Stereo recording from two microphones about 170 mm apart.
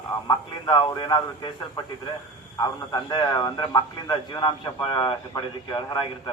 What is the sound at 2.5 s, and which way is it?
A man's voice, 25° left (ahead or behind).